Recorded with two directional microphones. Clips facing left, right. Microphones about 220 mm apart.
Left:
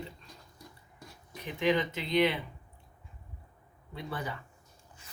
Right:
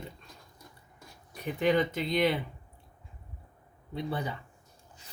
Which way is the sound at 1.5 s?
40° right (ahead or behind).